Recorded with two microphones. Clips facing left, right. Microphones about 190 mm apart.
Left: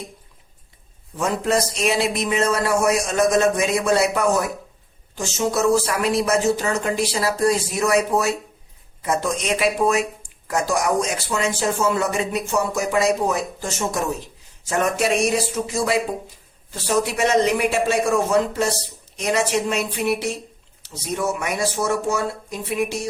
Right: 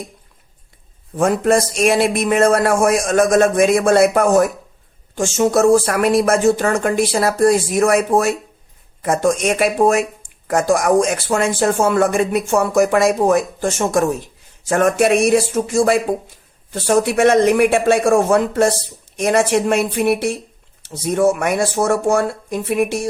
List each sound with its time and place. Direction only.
1.1 s speech: 50° right (ahead or behind)